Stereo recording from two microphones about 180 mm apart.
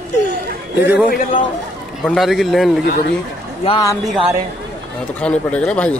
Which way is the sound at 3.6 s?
20° left (ahead or behind).